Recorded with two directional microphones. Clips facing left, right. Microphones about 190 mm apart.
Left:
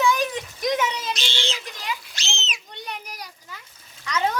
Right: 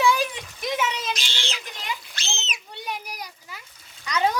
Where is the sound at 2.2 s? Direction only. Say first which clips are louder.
Right 1 dB; 55° right (ahead or behind).